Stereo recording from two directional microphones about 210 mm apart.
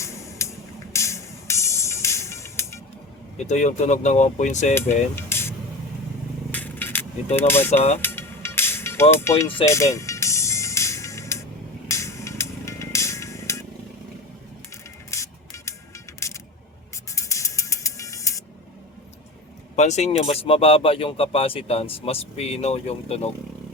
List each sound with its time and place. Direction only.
0.0 s music: 15° left (ahead or behind)
3.3 s speech: 35° left (ahead or behind)
4.7 s speech: 10° left (ahead or behind)
6.5 s a sound: 10° left (ahead or behind)
7.3 s speech: 10° left (ahead or behind)
7.9 s music: 10° left (ahead or behind)
15.1 s music: 15° left (ahead or behind)
17.1 s music: 15° left (ahead or behind)
19.7 s speech: 35° left (ahead or behind)